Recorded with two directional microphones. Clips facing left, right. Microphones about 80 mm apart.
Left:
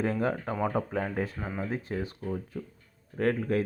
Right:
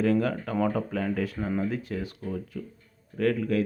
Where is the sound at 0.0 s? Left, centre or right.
Left.